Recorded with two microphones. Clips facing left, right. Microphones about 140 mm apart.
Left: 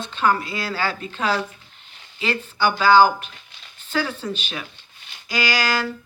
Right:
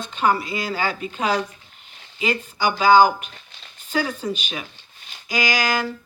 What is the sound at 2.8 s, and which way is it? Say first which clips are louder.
Speech: right 1 dB; 15° right (ahead or behind).